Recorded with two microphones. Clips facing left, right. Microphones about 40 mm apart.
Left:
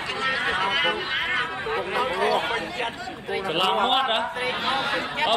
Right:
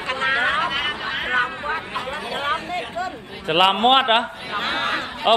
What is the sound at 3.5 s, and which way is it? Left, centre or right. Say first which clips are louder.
A man's voice: right 7 dB; right.